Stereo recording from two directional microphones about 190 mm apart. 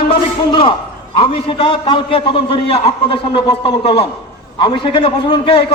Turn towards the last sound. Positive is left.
turn(degrees=25)  # may be behind; listen again after turning